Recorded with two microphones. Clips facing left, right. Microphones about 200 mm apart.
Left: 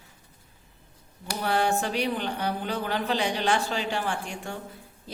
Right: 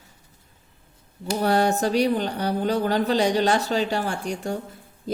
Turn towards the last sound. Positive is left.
turn(degrees=-40)  # may be behind; listen again after turning